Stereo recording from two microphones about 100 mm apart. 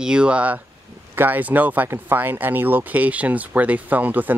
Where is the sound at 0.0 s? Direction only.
10° right (ahead or behind).